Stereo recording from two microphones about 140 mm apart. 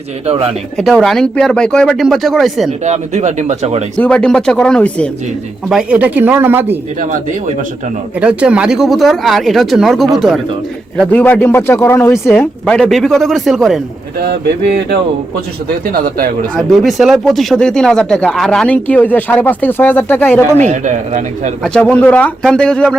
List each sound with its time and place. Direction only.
0.8 s speech: centre (ahead or behind)
2.8 s speech: 55° right (ahead or behind)
3.9 s speech: 5° left (ahead or behind)
5.6 s speech: 5° right (ahead or behind)
7.0 s speech: 65° right (ahead or behind)
8.2 s speech: 10° right (ahead or behind)
11.2 s speech: 15° left (ahead or behind)
12.3 s speech: 5° left (ahead or behind)
15.9 s speech: 90° right
16.6 s speech: centre (ahead or behind)
20.7 s speech: 60° right (ahead or behind)
21.6 s speech: 5° left (ahead or behind)